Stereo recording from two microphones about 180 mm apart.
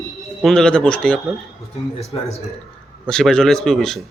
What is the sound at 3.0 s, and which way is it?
Speech, 5° left (ahead or behind).